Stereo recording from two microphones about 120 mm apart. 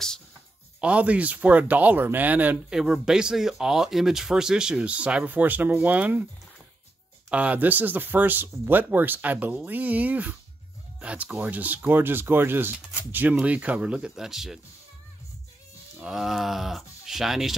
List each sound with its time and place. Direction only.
0.7 s speech: 10° right (ahead or behind)
7.2 s speech: 10° right (ahead or behind)
16.0 s speech: 5° right (ahead or behind)